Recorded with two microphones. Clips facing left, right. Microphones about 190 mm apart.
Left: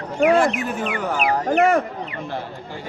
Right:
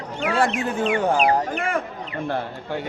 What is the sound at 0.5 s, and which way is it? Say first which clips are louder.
Speech: right 3 dB; 30° right (ahead or behind).